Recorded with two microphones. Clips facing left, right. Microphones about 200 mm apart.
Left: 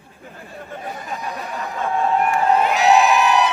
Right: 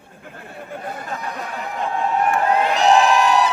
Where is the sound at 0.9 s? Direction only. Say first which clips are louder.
Right 1 dB; 60° right (ahead or behind).